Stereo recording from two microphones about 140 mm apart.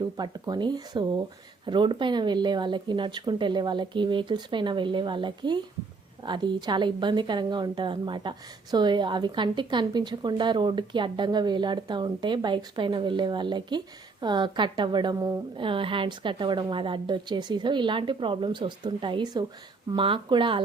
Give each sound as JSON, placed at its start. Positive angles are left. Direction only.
{"t": 0.0, "sound": "a woman's voice", "side_deg": -30}